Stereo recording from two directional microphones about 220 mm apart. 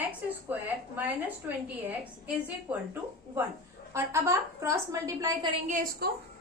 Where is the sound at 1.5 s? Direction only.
5° right (ahead or behind).